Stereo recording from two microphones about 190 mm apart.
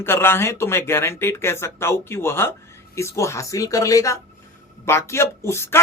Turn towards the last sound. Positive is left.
turn(degrees=15)  # may be behind; listen again after turning